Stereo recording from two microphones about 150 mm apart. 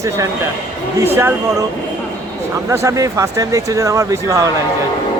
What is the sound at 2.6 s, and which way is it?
Speech, 20° right (ahead or behind).